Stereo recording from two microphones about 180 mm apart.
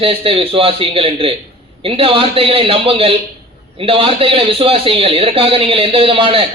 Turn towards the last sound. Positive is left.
turn(degrees=-30)  # may be behind; listen again after turning